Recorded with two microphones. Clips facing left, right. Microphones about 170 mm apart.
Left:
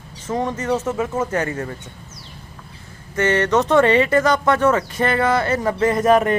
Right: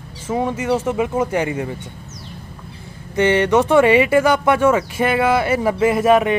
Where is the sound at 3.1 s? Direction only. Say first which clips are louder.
Right 3 dB; 15° right (ahead or behind).